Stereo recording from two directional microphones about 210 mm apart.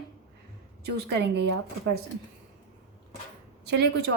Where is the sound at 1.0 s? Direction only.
55° right (ahead or behind).